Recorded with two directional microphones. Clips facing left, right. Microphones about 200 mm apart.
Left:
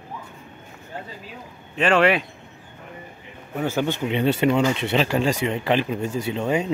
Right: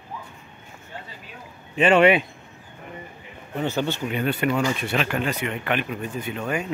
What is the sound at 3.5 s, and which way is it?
Speech, 10° left (ahead or behind).